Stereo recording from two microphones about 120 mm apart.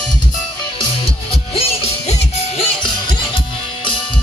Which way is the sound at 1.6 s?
55° left (ahead or behind).